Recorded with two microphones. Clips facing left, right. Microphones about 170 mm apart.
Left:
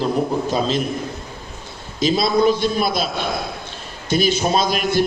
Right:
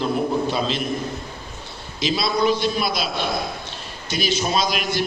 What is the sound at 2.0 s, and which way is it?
A man's voice, 45° left (ahead or behind).